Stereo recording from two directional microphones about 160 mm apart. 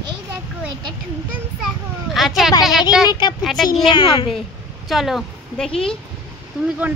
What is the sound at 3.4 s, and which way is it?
Speech, centre (ahead or behind).